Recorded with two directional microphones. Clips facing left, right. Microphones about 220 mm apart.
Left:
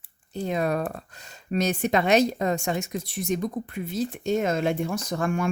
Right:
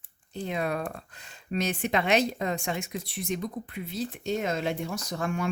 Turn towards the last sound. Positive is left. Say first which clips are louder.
# left 4 dB
turn(degrees=50)  # may be behind; listen again after turning